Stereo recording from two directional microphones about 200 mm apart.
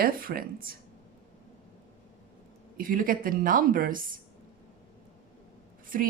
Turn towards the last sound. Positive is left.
turn(degrees=-45)  # may be behind; listen again after turning